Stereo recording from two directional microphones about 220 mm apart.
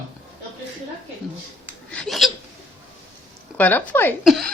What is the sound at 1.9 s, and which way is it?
Hiccup, 5° left (ahead or behind).